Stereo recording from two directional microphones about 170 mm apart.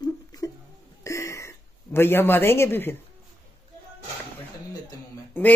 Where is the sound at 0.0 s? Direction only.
20° left (ahead or behind).